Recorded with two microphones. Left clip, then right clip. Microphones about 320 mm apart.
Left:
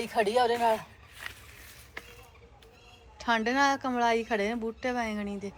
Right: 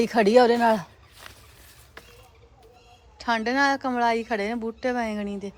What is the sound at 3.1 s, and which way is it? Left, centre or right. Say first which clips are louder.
Speech: right 3 dB; centre.